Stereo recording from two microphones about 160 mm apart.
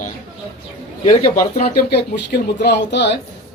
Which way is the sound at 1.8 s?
90° left.